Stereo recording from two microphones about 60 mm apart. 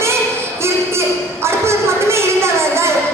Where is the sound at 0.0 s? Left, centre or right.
Right.